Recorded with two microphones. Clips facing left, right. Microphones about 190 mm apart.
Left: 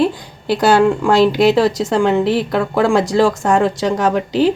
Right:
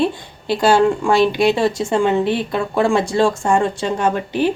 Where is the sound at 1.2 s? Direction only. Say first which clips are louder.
Left 4 dB; 90° left.